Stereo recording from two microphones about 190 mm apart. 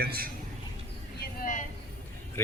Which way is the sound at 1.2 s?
40° left (ahead or behind).